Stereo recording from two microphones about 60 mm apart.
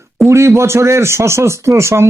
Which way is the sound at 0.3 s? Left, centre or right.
Right.